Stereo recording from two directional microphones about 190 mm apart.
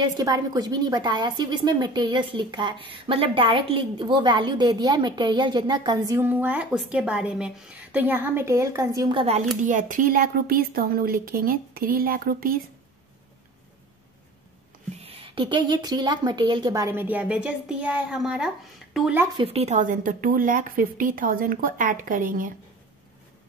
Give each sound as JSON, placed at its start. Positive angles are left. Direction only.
{"t": 0.0, "sound": "a woman's voice", "side_deg": -20}
{"t": 9.6, "sound": "a woman's voice", "side_deg": -40}
{"t": 15.0, "sound": "a woman's voice", "side_deg": -30}
{"t": 19.3, "sound": "a woman's voice", "side_deg": -30}